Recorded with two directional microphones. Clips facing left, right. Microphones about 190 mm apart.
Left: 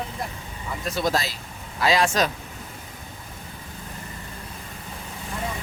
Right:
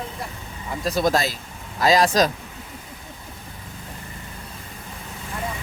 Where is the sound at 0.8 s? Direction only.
45° right (ahead or behind).